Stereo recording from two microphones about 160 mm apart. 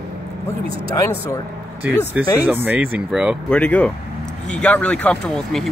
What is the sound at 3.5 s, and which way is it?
Speech, 10° left (ahead or behind).